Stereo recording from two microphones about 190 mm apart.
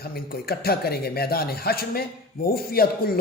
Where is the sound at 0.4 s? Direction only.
55° left (ahead or behind).